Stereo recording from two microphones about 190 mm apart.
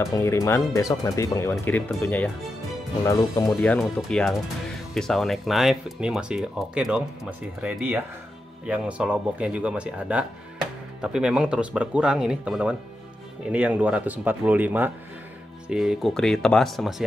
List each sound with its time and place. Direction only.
0.0 s speech: 15° left (ahead or behind)
3.4 s speech: centre (ahead or behind)